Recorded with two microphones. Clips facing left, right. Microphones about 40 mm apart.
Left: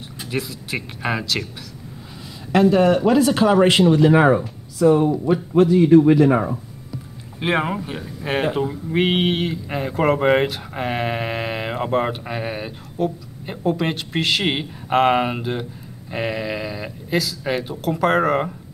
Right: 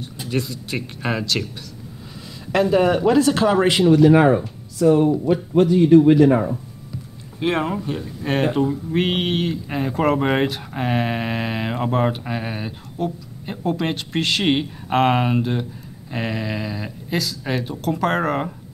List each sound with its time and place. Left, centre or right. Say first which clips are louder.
0.0 s speech: right 2 dB; centre
2.5 s a man's voice: left 2 dB; centre
5.6 s a man's voice: even; centre